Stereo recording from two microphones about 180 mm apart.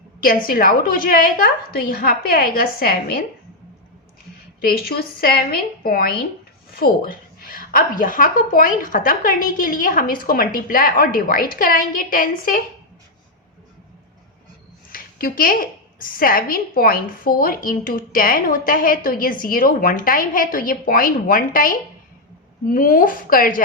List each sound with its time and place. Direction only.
0.2 s a woman's voice: 55° left (ahead or behind)
4.6 s a woman's voice: 55° left (ahead or behind)
14.9 s a sound: 55° left (ahead or behind)
16.0 s a woman's voice: 50° left (ahead or behind)